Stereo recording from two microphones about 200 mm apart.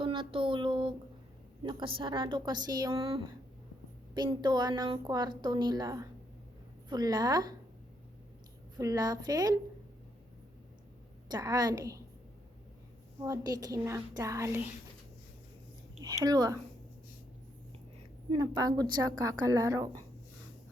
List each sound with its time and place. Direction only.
0.0 s a sound: 25° right (ahead or behind)
1.6 s a woman's voice: 25° right (ahead or behind)
8.8 s a woman's voice: 15° right (ahead or behind)
11.3 s a woman's voice: 20° right (ahead or behind)
13.2 s a woman's voice: 15° right (ahead or behind)
16.0 s a woman's voice: 20° right (ahead or behind)
18.3 s a woman's voice: 20° right (ahead or behind)